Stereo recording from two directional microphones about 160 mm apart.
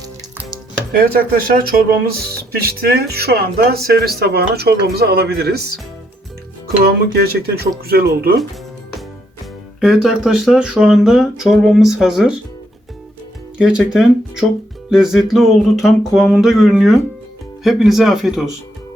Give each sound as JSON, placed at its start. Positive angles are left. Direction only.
{"t": 0.9, "sound": "speech", "side_deg": -70}
{"t": 6.8, "sound": "speech", "side_deg": -75}
{"t": 9.8, "sound": "speech", "side_deg": 0}
{"t": 13.6, "sound": "speech", "side_deg": -5}